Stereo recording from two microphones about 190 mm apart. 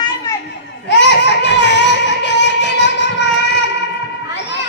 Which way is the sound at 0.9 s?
70° left (ahead or behind).